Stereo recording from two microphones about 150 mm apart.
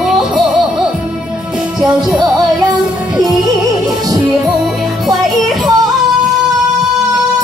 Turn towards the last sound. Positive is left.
turn(degrees=0)  # may be behind; listen again after turning